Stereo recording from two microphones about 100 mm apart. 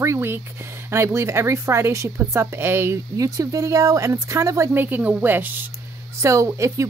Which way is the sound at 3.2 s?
35° right (ahead or behind).